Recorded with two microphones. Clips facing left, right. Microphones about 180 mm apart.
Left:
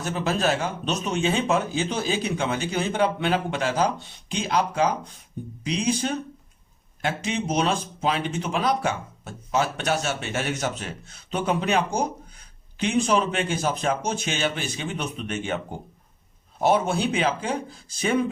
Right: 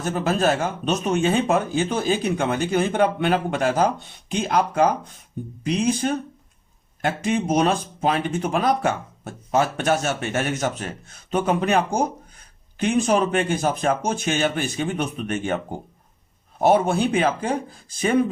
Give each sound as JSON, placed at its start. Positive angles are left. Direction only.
{"t": 0.0, "sound": "speech", "side_deg": -50}